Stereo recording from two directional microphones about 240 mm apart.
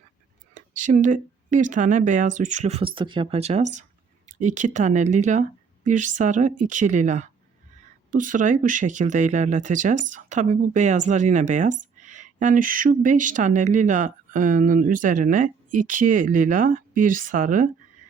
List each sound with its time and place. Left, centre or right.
0.5 s speech: right